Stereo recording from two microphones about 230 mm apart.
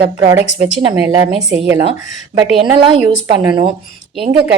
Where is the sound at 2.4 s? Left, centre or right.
Right.